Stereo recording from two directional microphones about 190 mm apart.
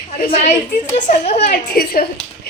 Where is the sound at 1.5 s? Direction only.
55° left (ahead or behind).